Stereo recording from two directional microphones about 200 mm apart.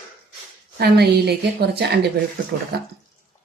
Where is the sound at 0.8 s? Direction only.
55° right (ahead or behind).